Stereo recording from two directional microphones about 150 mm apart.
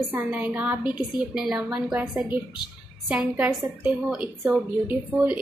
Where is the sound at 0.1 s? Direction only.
10° right (ahead or behind).